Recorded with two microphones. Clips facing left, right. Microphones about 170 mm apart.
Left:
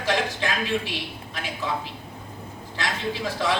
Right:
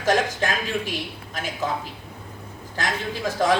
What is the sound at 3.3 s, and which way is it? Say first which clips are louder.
Speech: right 6 dB; 45° right (ahead or behind).